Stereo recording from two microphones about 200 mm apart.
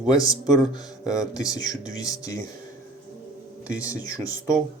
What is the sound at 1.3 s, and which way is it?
Speech, 15° left (ahead or behind).